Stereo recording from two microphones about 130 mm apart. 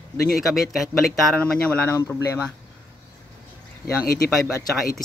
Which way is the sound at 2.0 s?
25° left (ahead or behind).